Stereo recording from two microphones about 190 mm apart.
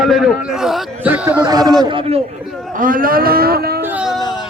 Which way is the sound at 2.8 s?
45° right (ahead or behind).